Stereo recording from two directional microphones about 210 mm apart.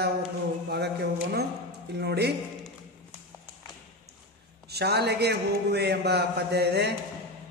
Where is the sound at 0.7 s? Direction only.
50° right (ahead or behind).